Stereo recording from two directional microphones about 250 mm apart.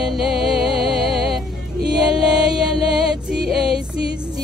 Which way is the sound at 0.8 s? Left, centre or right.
Right.